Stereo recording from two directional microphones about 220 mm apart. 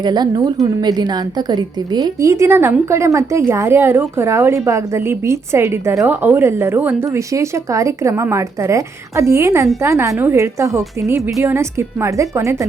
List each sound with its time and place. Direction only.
0.0 s a woman's voice: 20° right (ahead or behind)